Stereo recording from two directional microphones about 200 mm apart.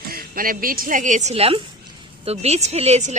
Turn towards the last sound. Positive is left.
turn(degrees=-35)  # may be behind; listen again after turning